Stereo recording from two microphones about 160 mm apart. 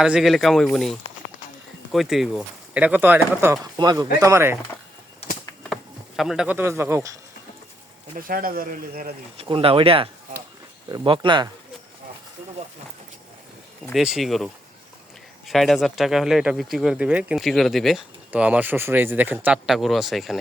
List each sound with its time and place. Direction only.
0.0 s speech: 5° right (ahead or behind)
5.6 s speech: centre (ahead or behind); by 7.2 s 15° right (ahead or behind)
8.1 s speech: 60° right (ahead or behind)
9.4 s speech: 35° right (ahead or behind)
13.9 s speech: 5° right (ahead or behind)